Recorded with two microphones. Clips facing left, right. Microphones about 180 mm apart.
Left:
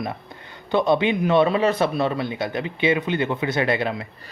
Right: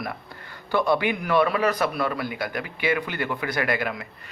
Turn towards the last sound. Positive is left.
turn(degrees=25)  # may be behind; listen again after turning